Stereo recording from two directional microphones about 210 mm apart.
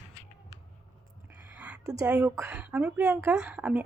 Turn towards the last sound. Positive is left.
turn(degrees=-5)  # may be behind; listen again after turning